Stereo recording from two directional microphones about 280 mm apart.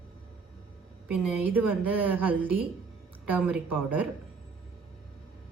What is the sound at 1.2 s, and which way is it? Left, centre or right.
Speech, centre.